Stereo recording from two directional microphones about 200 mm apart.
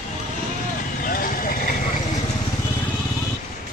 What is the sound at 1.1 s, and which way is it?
Vehicle, 45° left (ahead or behind).